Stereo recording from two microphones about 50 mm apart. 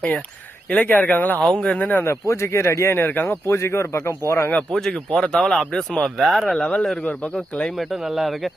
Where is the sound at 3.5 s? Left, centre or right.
Left.